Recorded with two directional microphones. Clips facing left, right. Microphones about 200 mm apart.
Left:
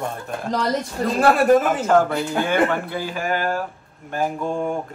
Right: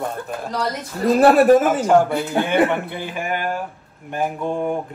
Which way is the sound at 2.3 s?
20° right (ahead or behind).